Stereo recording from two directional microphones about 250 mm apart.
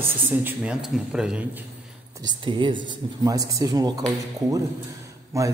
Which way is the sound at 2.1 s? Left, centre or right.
Centre.